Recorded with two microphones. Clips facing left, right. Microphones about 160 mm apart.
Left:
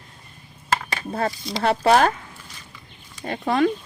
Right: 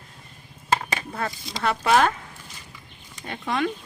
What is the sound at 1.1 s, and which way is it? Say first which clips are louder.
Speech: left 5 dB; 30° left (ahead or behind).